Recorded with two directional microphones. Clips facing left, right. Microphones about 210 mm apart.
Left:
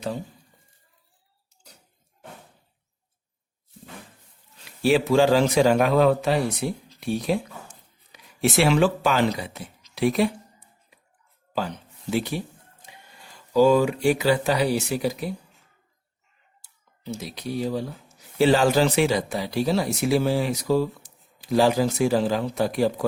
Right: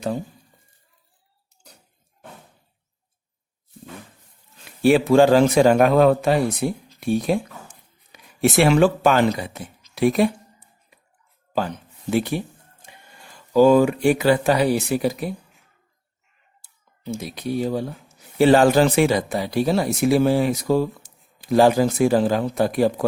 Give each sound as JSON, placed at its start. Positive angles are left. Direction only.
{"t": 4.6, "sound": "speech", "side_deg": -50}
{"t": 12.1, "sound": "speech", "side_deg": -55}
{"t": 13.5, "sound": "speech", "side_deg": -50}
{"t": 16.6, "sound": "speech", "side_deg": -55}